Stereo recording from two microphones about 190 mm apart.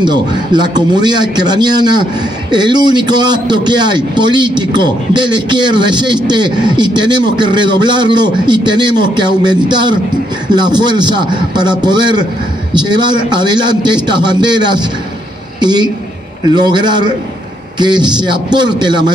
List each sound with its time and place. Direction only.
0.0 s a man's voice: 20° right (ahead or behind)